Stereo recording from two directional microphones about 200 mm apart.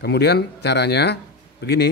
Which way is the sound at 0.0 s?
55° left (ahead or behind).